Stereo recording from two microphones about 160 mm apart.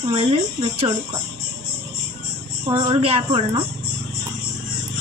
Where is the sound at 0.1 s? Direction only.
35° right (ahead or behind).